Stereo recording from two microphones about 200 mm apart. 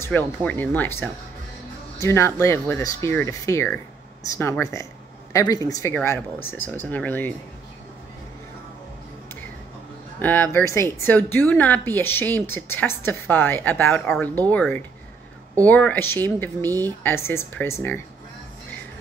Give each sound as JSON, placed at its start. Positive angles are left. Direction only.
{"t": 0.0, "sound": "speech", "side_deg": 10}
{"t": 10.1, "sound": "speech", "side_deg": 10}